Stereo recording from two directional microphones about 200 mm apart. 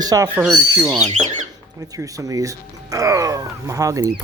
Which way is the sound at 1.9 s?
15° right (ahead or behind).